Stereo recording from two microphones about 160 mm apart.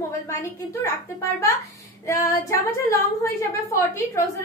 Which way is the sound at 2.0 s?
20° left (ahead or behind).